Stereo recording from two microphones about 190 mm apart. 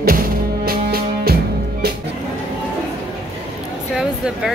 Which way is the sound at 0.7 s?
50° right (ahead or behind).